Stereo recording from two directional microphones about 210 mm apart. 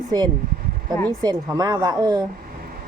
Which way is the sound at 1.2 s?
20° right (ahead or behind).